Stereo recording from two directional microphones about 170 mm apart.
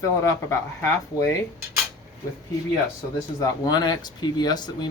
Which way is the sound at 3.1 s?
25° left (ahead or behind).